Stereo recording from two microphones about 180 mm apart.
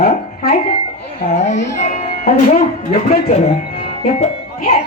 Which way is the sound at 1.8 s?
40° left (ahead or behind).